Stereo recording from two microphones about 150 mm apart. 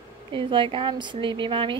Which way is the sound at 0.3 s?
35° right (ahead or behind).